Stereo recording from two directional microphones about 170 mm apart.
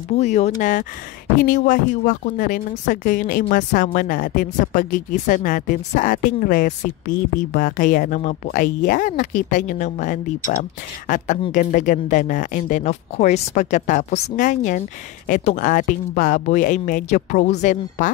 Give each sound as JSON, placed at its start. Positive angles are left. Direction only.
{"t": 0.1, "sound": "a woman's voice", "side_deg": 40}